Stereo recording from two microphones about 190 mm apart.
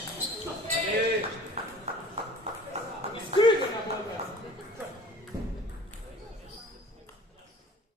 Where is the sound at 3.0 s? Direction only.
35° right (ahead or behind).